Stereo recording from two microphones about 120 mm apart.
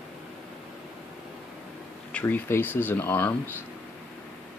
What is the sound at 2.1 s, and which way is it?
Speech, 15° left (ahead or behind).